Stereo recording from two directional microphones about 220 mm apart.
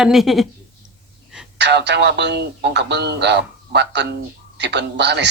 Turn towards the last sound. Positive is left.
turn(degrees=-50)  # may be behind; listen again after turning